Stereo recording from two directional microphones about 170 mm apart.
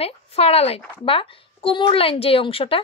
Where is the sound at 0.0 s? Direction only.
35° left (ahead or behind).